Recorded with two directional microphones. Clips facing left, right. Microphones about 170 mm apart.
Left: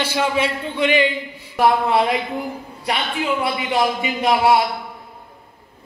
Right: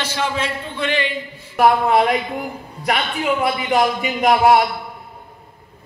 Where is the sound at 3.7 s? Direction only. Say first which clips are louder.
Right 1 dB; 45° right (ahead or behind).